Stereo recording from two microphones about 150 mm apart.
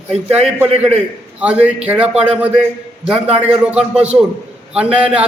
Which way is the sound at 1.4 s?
5° right (ahead or behind).